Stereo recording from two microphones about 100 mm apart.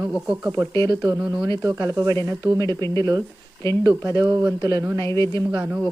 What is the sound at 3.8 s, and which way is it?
A man's voice, 40° right (ahead or behind).